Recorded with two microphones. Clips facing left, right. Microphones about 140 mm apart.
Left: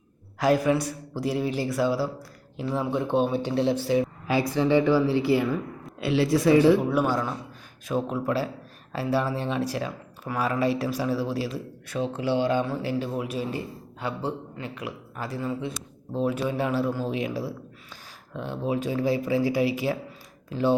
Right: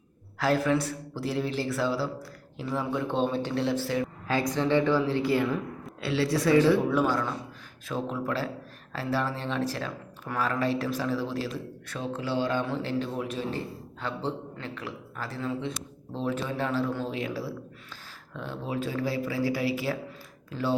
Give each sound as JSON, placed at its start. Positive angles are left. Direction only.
{"t": 0.3, "sound": "speech", "side_deg": 15}
{"t": 6.0, "sound": "a man's voice", "side_deg": 20}